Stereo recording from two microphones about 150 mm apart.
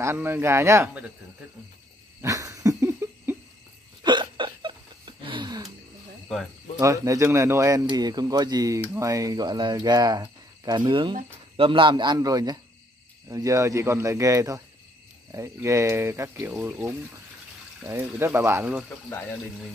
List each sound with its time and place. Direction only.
0.0 s speech: 15° right (ahead or behind)
2.2 s a sound: 20° right (ahead or behind)
4.0 s hiccup: 30° right (ahead or behind)
6.8 s a man's voice: 20° right (ahead or behind)
18.2 s speech: 15° right (ahead or behind)